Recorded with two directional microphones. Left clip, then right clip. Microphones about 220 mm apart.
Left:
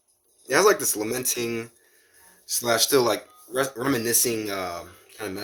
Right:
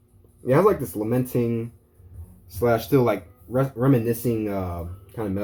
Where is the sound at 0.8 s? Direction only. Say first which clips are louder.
Right 2 dB; 50° left (ahead or behind).